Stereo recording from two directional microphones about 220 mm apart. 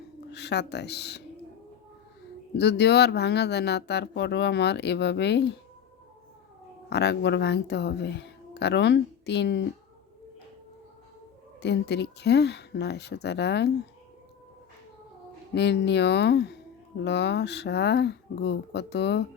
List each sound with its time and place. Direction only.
0.3 s speech: 50° left (ahead or behind)
2.6 s speech: 50° left (ahead or behind)
6.9 s speech: 50° left (ahead or behind)
11.6 s speech: 50° left (ahead or behind)
15.5 s speech: 50° left (ahead or behind)